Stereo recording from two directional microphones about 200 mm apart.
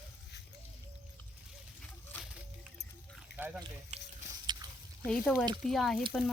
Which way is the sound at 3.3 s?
10° right (ahead or behind).